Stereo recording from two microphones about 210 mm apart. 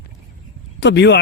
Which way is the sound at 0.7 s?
55° left (ahead or behind).